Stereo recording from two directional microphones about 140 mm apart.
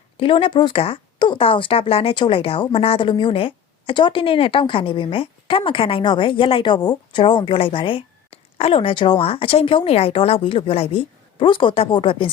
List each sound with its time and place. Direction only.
0.2 s speech: 40° left (ahead or behind)